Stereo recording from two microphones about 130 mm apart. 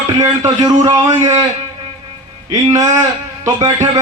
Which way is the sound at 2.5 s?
25° right (ahead or behind).